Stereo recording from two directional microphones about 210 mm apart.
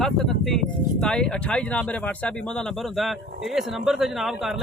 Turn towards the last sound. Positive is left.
turn(degrees=0)  # may be behind; listen again after turning